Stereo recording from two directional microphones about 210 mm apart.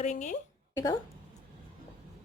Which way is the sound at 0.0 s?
35° left (ahead or behind).